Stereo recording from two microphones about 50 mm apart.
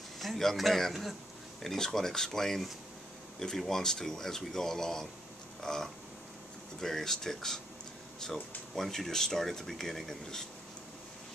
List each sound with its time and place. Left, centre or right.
0.2 s a man's voice: centre
5.6 s a sound: centre
6.8 s speech: centre